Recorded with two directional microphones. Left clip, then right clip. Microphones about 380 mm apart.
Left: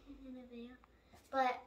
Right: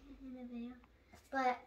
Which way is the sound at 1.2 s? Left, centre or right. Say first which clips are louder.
Left 1 dB; centre.